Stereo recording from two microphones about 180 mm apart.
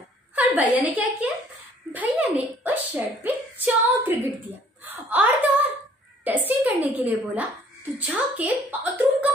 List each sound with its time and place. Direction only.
0.4 s a woman's voice: 10° right (ahead or behind)